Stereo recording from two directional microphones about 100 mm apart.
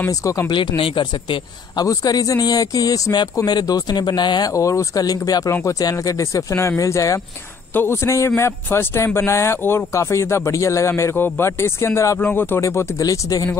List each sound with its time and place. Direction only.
0.1 s speech: 35° left (ahead or behind)
0.5 s speech: 60° left (ahead or behind)
1.8 s speech: 40° left (ahead or behind)
12.2 s speech: 20° left (ahead or behind); by 13.5 s 35° left (ahead or behind)